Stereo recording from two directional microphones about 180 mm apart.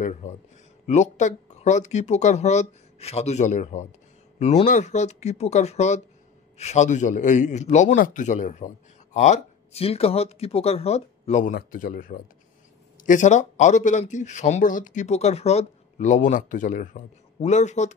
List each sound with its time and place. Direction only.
0.0 s a man's voice: 40° left (ahead or behind)